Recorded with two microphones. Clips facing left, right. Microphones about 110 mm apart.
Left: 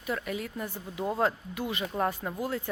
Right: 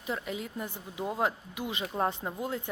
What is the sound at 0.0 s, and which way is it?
Speech, 20° right (ahead or behind).